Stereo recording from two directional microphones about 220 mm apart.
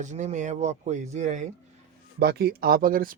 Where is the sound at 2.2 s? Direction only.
45° right (ahead or behind).